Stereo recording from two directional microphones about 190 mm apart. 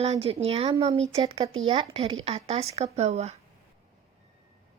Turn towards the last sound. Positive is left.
turn(degrees=-35)  # may be behind; listen again after turning